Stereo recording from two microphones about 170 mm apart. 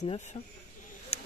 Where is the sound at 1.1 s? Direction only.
35° left (ahead or behind).